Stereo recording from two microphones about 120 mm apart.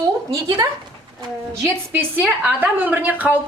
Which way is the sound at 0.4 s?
35° right (ahead or behind).